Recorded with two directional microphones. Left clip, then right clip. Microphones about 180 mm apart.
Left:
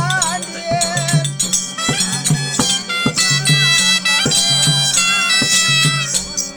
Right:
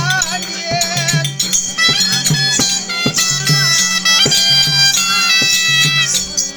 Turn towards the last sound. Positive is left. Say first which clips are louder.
# right 2 dB
turn(degrees=-15)  # may be behind; listen again after turning